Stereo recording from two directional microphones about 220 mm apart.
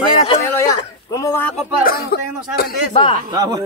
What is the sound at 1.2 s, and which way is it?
Speech, 10° left (ahead or behind).